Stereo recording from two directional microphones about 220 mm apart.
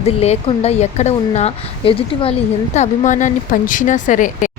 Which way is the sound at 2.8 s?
35° left (ahead or behind).